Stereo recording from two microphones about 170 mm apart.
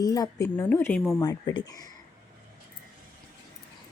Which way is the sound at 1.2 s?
25° left (ahead or behind).